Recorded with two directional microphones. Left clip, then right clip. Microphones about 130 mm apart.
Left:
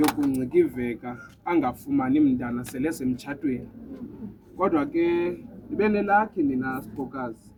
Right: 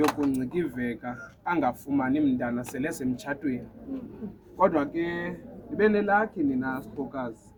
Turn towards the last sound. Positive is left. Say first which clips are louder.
# left 1 dB
turn(degrees=-30)  # may be behind; listen again after turning